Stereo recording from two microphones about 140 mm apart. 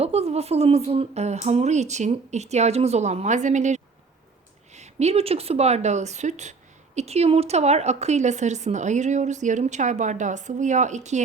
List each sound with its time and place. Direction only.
0.0 s speech: 50° right (ahead or behind)